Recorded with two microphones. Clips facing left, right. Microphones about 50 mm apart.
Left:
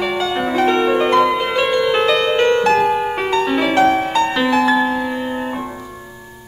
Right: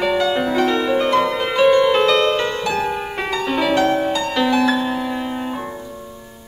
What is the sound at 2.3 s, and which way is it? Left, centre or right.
Music, left.